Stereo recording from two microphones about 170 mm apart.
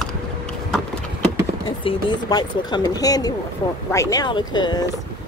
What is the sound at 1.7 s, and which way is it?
Speech, 25° left (ahead or behind).